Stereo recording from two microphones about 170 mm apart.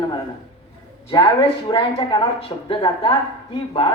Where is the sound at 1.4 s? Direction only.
30° left (ahead or behind).